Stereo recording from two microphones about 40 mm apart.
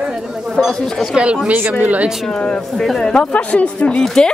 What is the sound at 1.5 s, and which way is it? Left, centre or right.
Speech, right.